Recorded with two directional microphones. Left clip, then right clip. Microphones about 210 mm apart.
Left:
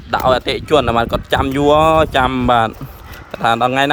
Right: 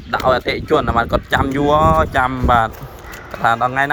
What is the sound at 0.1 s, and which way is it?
Speech, 25° left (ahead or behind).